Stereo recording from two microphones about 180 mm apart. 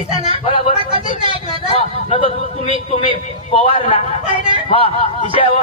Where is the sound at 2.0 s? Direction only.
30° left (ahead or behind).